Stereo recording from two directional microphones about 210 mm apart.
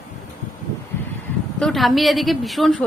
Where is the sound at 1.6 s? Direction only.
Centre (ahead or behind).